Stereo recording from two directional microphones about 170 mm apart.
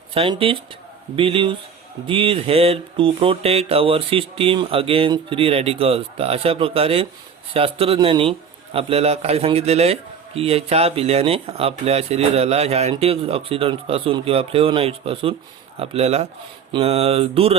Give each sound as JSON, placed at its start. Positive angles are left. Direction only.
{"t": 0.1, "sound": "a man's voice", "side_deg": -30}